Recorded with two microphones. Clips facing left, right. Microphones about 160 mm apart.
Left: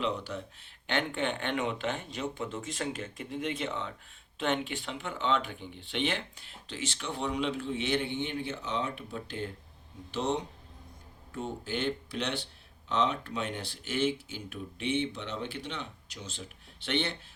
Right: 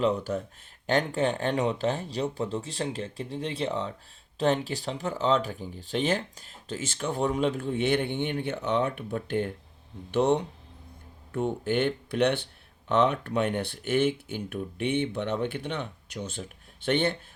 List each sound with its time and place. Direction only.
0.0 s speech: 45° right (ahead or behind)